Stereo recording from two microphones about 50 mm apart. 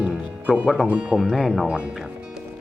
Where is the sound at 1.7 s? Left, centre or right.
Right.